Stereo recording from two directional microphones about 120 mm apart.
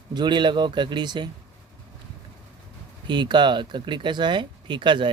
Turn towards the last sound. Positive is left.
turn(degrees=-40)  # may be behind; listen again after turning